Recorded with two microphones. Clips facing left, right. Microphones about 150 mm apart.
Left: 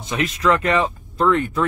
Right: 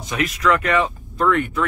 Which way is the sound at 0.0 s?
25° left (ahead or behind).